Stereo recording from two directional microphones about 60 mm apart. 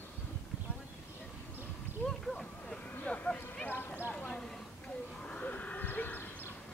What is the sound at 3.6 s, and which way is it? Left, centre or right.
Clip-clop, left.